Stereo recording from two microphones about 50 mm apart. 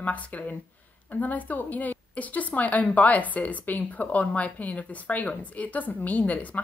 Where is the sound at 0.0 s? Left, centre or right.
Left.